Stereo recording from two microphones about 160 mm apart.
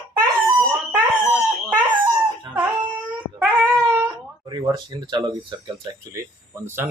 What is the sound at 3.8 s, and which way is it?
Wail, 15° right (ahead or behind).